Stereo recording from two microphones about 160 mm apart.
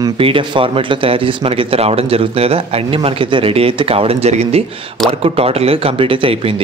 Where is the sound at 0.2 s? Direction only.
35° right (ahead or behind).